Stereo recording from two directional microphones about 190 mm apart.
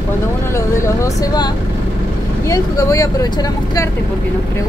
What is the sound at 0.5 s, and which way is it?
Speech, 15° left (ahead or behind).